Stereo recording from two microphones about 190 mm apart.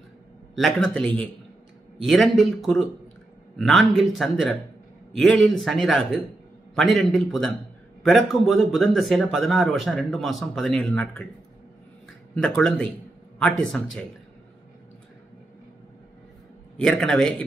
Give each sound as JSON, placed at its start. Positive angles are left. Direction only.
{"t": 0.6, "sound": "a man's voice", "side_deg": 0}
{"t": 12.4, "sound": "speech", "side_deg": 5}
{"t": 16.7, "sound": "speech", "side_deg": 5}